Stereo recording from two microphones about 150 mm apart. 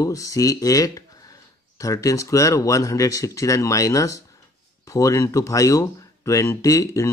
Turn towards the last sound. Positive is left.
turn(degrees=20)  # may be behind; listen again after turning